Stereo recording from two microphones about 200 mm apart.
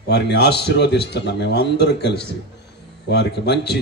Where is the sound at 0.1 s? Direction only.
55° left (ahead or behind).